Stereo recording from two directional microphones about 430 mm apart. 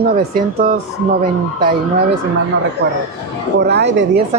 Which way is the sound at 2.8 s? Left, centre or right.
Right.